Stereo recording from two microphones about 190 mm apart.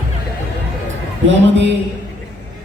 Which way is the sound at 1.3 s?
75° right (ahead or behind).